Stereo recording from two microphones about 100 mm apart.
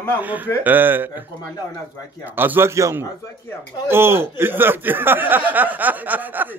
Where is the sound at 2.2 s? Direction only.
20° right (ahead or behind).